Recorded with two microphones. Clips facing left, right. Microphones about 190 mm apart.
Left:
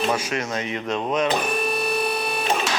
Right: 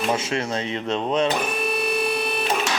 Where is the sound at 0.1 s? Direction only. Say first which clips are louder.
Right 1 dB; 25° right (ahead or behind).